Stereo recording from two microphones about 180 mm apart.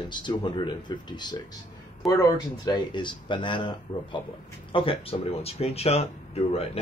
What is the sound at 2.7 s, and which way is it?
Speech, 25° left (ahead or behind).